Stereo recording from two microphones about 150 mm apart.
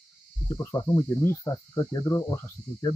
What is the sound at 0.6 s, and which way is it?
Speech, 20° left (ahead or behind).